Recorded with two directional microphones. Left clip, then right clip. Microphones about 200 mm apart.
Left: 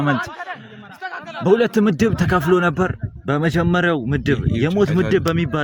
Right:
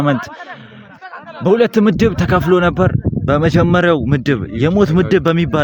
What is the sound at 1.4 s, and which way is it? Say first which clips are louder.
A man's voice: right 4 dB; 40° right (ahead or behind).